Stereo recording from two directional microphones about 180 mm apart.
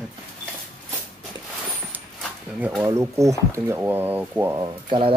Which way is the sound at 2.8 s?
15° right (ahead or behind).